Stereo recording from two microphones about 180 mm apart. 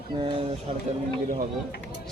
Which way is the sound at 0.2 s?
25° right (ahead or behind).